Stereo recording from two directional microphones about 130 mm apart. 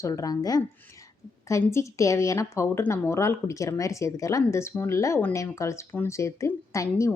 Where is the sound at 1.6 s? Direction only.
20° left (ahead or behind).